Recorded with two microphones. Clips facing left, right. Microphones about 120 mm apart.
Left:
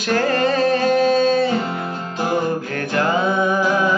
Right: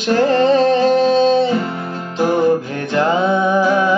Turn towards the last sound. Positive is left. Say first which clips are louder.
# right 4 dB
turn(degrees=-25)  # may be behind; listen again after turning